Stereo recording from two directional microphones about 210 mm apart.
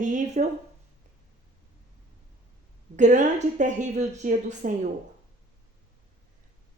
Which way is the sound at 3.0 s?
35° right (ahead or behind).